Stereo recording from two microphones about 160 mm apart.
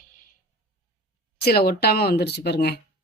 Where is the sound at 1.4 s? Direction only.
75° left (ahead or behind).